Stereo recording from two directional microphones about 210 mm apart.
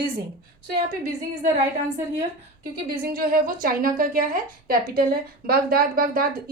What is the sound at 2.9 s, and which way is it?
A woman's voice, 45° right (ahead or behind).